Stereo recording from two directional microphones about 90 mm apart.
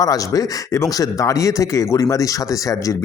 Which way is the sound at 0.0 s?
40° left (ahead or behind).